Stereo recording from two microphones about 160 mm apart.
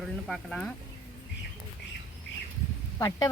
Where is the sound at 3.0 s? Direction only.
20° left (ahead or behind).